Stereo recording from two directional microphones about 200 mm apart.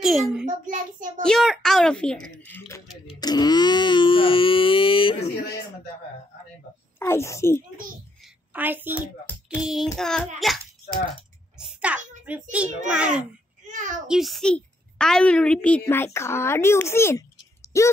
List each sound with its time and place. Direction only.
0.0 s a sound: centre (ahead or behind)
0.7 s a child's voice: 40° right (ahead or behind)
1.2 s a woman's voice: centre (ahead or behind)
3.2 s wail: 20° left (ahead or behind)
7.0 s a woman's voice: 15° left (ahead or behind)
8.5 s a child's voice: 10° right (ahead or behind)
9.2 s child singing: 10° left (ahead or behind)
9.9 s a child's voice: centre (ahead or behind)
11.5 s a sound: 5° right (ahead or behind)
12.3 s a child's voice: 5° right (ahead or behind)
13.7 s a sound: 40° right (ahead or behind)
14.0 s a woman's voice: centre (ahead or behind); by 17.9 s 15° left (ahead or behind)